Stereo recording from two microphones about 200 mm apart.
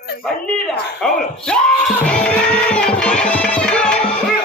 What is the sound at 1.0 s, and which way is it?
Speech, 5° left (ahead or behind).